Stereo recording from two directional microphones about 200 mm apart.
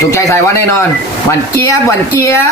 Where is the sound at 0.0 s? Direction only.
15° left (ahead or behind).